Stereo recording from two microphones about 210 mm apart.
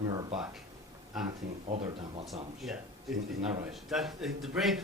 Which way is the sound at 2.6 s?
Centre (ahead or behind).